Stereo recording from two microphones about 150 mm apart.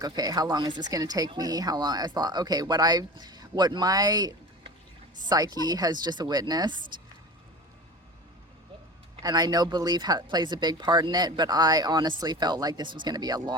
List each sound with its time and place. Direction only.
0.0 s speech: 25° right (ahead or behind)
9.2 s speech: 25° right (ahead or behind)